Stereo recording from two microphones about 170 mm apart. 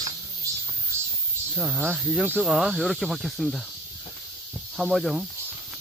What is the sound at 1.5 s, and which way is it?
Speech, 5° right (ahead or behind).